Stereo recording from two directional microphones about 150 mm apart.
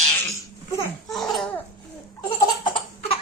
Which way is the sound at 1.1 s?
Centre (ahead or behind).